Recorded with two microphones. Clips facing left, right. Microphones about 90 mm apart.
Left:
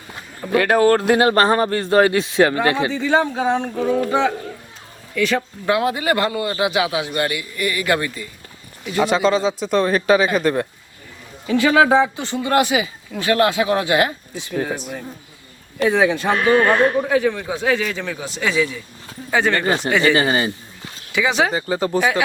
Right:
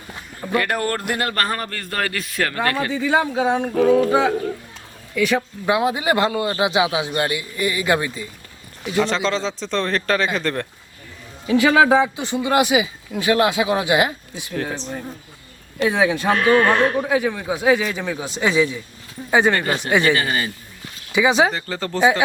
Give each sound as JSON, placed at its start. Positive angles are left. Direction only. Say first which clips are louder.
{"t": 0.5, "sound": "speech", "louder": "left 7 dB", "side_deg": 80}
{"t": 1.3, "sound": "a man's voice", "louder": "left 8 dB", "side_deg": 25}
{"t": 2.9, "sound": "a man's voice", "louder": "left 1 dB", "side_deg": -10}
{"t": 9.0, "sound": "a man's voice", "louder": "left 4 dB", "side_deg": 10}
{"t": 11.4, "sound": "a man's voice", "louder": "even", "side_deg": -15}
{"t": 12.1, "sound": "speech", "louder": "even", "side_deg": -15}
{"t": 14.5, "sound": "a man's voice", "louder": "left 2 dB", "side_deg": 5}
{"t": 15.8, "sound": "a man's voice", "louder": "left 2 dB", "side_deg": -10}
{"t": 19.6, "sound": "a man's voice", "louder": "left 4 dB", "side_deg": 20}
{"t": 19.9, "sound": "speech", "louder": "even", "side_deg": -15}
{"t": 20.1, "sound": "a man's voice", "louder": "left 4 dB", "side_deg": 25}
{"t": 21.1, "sound": "speech", "louder": "right 2 dB", "side_deg": -20}
{"t": 21.5, "sound": "a man's voice", "louder": "left 6 dB", "side_deg": 15}